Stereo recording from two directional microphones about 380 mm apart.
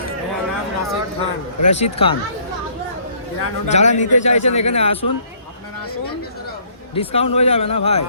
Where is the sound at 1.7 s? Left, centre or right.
Centre.